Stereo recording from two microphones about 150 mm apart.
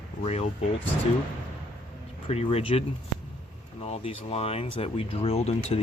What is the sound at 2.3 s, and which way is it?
Speech, 40° left (ahead or behind).